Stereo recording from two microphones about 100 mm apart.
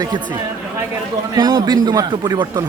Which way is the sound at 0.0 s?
50° right (ahead or behind).